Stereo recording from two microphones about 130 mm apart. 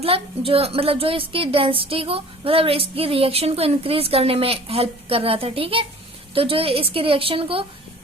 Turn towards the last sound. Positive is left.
turn(degrees=-45)  # may be behind; listen again after turning